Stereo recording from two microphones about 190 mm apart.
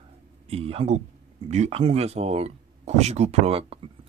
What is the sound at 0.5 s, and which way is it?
Speech, 30° right (ahead or behind).